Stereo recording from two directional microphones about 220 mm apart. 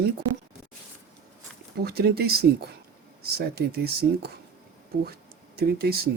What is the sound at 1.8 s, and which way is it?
Speech, 45° right (ahead or behind).